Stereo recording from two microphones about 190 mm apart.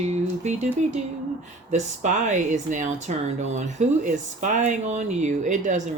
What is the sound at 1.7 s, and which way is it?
Speech, 40° right (ahead or behind).